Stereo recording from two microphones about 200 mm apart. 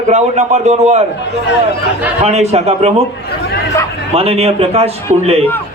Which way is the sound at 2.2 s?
35° right (ahead or behind).